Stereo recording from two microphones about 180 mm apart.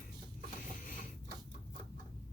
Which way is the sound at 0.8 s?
45° left (ahead or behind).